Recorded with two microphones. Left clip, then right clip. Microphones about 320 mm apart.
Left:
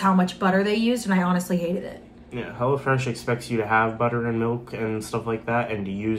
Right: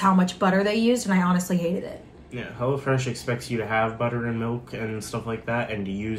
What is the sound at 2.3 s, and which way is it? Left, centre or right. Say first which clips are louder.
Speech: left 3 dB; centre.